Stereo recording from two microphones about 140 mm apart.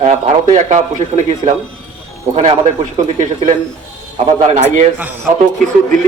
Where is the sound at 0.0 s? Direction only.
60° right (ahead or behind).